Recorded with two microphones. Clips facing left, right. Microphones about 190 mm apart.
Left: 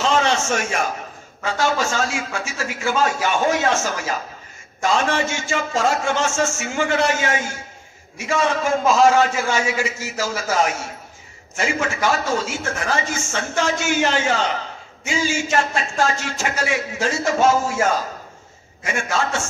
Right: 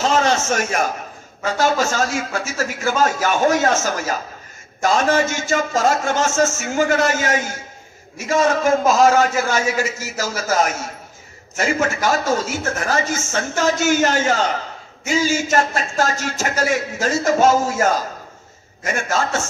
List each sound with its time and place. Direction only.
0.0 s a sound: 40° right (ahead or behind)
0.5 s a man's voice: 40° right (ahead or behind)
18.9 s a man's voice: 40° right (ahead or behind)